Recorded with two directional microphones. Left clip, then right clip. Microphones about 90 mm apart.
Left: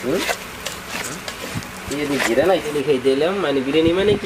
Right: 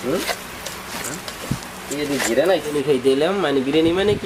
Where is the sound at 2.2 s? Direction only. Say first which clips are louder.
Left 1 dB; 10° right (ahead or behind).